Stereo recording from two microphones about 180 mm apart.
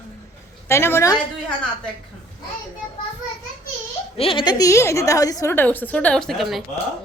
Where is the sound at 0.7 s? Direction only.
15° left (ahead or behind).